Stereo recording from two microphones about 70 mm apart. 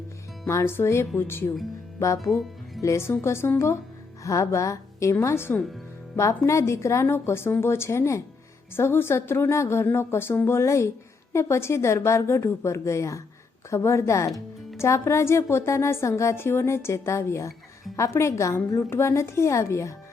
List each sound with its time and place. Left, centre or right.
0.4 s a woman's voice: left
2.1 s speech: centre
2.8 s a woman's voice: left
4.2 s a woman's voice: left